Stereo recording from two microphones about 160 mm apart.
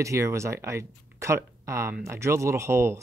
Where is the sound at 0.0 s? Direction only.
20° right (ahead or behind).